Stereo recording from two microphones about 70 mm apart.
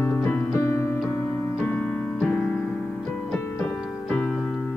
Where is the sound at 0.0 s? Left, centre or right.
Left.